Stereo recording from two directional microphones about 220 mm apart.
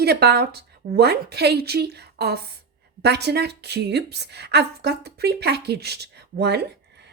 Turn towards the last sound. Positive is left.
turn(degrees=-50)  # may be behind; listen again after turning